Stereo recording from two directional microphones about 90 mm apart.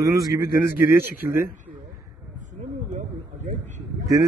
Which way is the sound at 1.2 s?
25° right (ahead or behind).